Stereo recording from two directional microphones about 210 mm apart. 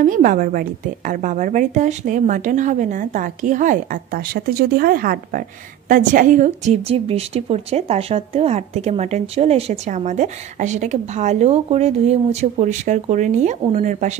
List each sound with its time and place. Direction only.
0.0 s a woman's voice: 40° right (ahead or behind)